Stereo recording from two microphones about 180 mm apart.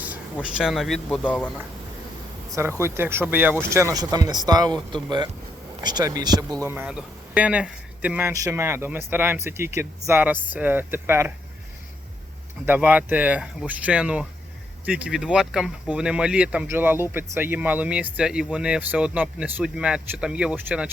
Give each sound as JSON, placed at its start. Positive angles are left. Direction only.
{"t": 0.4, "sound": "speech", "side_deg": -5}
{"t": 2.5, "sound": "speech", "side_deg": -15}
{"t": 12.6, "sound": "speech", "side_deg": -10}